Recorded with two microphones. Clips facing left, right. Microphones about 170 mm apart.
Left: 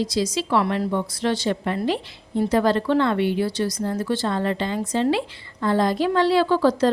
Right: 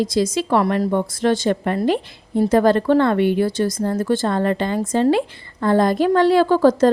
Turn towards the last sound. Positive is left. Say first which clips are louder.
# right 4 dB
turn(degrees=-45)  # may be behind; listen again after turning